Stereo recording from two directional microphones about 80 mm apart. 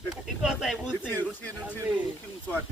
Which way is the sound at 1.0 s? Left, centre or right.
Left.